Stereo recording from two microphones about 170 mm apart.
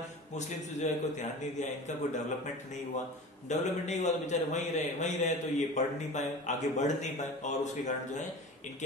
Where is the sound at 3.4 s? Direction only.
45° left (ahead or behind).